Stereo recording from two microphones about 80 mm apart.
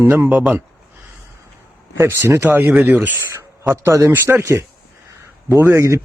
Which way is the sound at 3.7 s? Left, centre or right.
Right.